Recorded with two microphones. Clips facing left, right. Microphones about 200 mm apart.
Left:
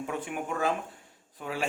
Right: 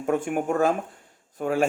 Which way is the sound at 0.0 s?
50° right (ahead or behind).